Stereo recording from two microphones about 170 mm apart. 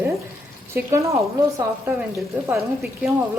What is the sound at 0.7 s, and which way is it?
A woman's voice, 15° right (ahead or behind).